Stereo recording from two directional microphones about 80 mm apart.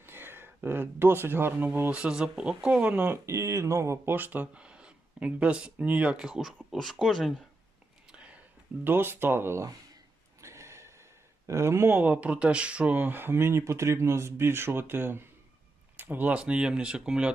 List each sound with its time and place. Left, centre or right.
0.0 s speech: right
2.0 s speech: centre
3.1 s speech: right
4.1 s speech: right; by 7.3 s centre
8.1 s a sound: centre
8.8 s speech: right
10.4 s a sound: right
11.4 s speech: right
11.9 s speech: centre